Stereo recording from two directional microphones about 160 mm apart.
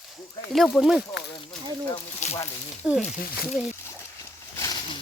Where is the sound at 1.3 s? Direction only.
30° left (ahead or behind).